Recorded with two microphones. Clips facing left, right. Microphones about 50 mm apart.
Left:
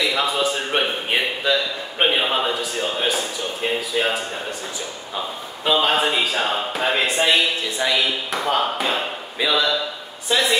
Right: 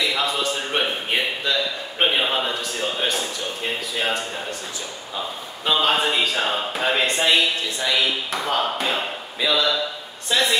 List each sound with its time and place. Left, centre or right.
0.0 s a sound: centre
3.9 s speech: centre
5.7 s a man's voice: centre